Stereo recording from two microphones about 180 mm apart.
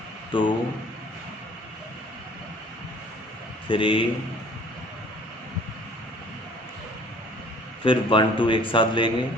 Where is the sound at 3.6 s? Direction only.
30° left (ahead or behind).